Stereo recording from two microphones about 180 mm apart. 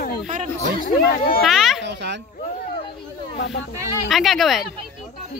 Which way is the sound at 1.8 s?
75° right (ahead or behind).